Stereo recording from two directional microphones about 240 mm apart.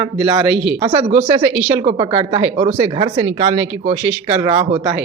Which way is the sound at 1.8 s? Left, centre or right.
Right.